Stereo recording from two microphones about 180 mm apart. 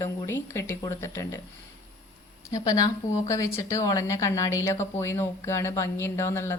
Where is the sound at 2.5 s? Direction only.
20° left (ahead or behind).